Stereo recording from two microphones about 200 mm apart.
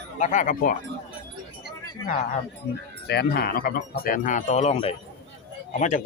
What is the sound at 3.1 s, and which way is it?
Speech, 55° left (ahead or behind).